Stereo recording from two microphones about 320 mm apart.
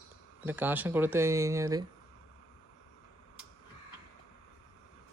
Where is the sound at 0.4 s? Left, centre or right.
Centre.